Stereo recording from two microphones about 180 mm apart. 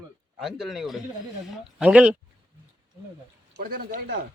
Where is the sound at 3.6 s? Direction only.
50° right (ahead or behind).